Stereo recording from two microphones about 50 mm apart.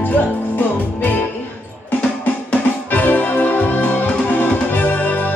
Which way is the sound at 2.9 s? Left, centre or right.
Left.